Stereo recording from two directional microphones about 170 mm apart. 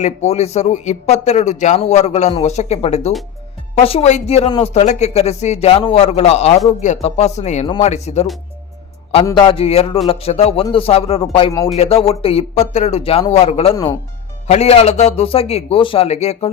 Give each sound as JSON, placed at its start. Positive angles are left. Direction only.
{"t": 0.0, "sound": "a man's voice", "side_deg": 40}